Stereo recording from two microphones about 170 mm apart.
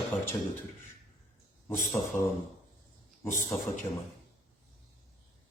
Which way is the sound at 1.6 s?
15° left (ahead or behind).